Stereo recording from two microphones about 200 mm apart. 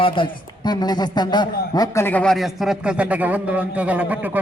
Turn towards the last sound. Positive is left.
turn(degrees=-10)  # may be behind; listen again after turning